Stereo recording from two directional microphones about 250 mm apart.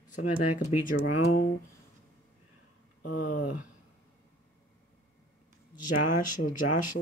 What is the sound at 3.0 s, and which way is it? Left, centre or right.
Speech, left.